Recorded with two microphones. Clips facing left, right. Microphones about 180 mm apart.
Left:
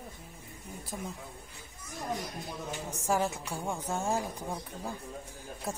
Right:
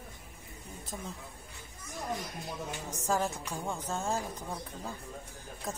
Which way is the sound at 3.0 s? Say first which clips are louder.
Left 1 dB; 15° left (ahead or behind).